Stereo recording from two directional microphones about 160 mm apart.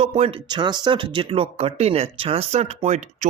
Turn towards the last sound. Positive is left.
turn(degrees=-50)  # may be behind; listen again after turning